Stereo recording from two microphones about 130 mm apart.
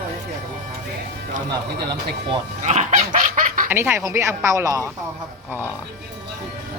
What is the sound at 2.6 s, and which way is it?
Dog, 65° right (ahead or behind).